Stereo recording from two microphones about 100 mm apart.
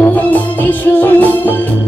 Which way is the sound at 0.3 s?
15° left (ahead or behind).